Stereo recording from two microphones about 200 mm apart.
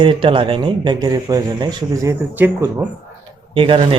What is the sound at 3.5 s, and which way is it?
Speech, 25° right (ahead or behind).